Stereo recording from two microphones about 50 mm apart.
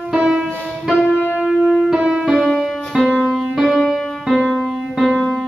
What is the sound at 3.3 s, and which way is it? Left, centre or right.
Music, centre.